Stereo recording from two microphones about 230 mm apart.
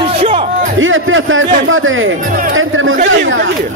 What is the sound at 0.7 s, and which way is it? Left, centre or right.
Speech, right.